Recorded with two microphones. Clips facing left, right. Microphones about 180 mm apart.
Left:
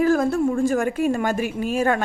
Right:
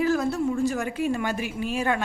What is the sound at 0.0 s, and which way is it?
A woman's voice, 50° left (ahead or behind).